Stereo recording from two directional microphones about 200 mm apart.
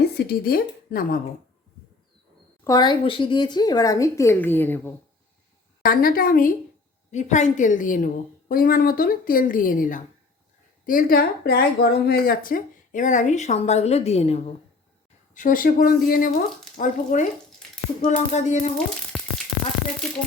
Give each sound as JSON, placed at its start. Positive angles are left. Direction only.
{"t": 0.0, "sound": "speech", "side_deg": 50}
{"t": 2.6, "sound": "a woman's voice", "side_deg": 20}
{"t": 5.8, "sound": "a woman's voice", "side_deg": 45}
{"t": 15.4, "sound": "a woman's voice", "side_deg": 45}
{"t": 19.1, "sound": "a sound", "side_deg": 0}